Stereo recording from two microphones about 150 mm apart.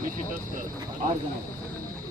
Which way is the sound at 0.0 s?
65° right (ahead or behind).